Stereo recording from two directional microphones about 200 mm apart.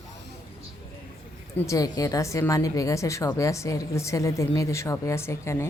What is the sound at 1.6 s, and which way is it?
A woman's voice, 15° left (ahead or behind).